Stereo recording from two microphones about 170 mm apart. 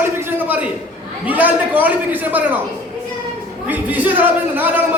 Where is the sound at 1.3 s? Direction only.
10° right (ahead or behind).